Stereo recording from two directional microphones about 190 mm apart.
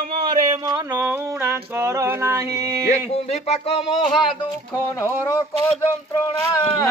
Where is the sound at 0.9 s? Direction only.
10° right (ahead or behind).